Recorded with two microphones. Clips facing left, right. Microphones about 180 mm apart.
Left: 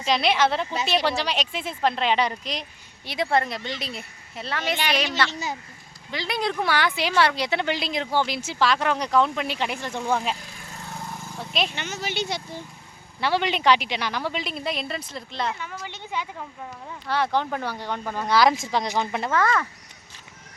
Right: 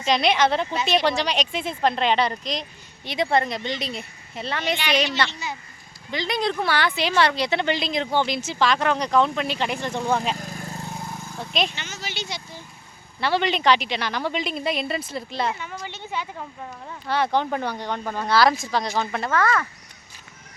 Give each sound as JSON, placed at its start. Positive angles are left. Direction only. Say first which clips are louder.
{"t": 0.0, "sound": "a woman's voice", "louder": "right 1 dB", "side_deg": 5}
{"t": 5.3, "sound": "speech", "louder": "left 2 dB", "side_deg": 40}
{"t": 6.1, "sound": "a woman's voice", "louder": "right 2 dB", "side_deg": 5}
{"t": 10.3, "sound": "vehicle", "louder": "right 8 dB", "side_deg": -45}
{"t": 11.7, "sound": "speech", "louder": "left 4 dB", "side_deg": 55}
{"t": 13.1, "sound": "a woman's voice", "louder": "right 1 dB", "side_deg": 10}
{"t": 16.9, "sound": "a woman's voice", "louder": "right 2 dB", "side_deg": 0}